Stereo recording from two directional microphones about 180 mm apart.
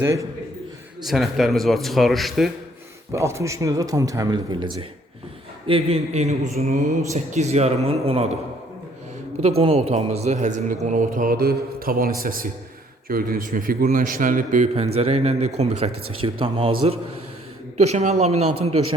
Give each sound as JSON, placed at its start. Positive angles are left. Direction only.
{"t": 0.0, "sound": "a man's voice", "side_deg": -15}
{"t": 1.0, "sound": "a man's voice", "side_deg": 0}
{"t": 3.1, "sound": "a man's voice", "side_deg": -15}
{"t": 9.4, "sound": "a man's voice", "side_deg": -35}
{"t": 17.7, "sound": "a man's voice", "side_deg": -40}